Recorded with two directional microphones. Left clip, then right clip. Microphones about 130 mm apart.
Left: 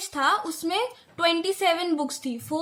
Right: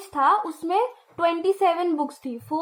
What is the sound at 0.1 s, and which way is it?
A woman's voice, 20° right (ahead or behind).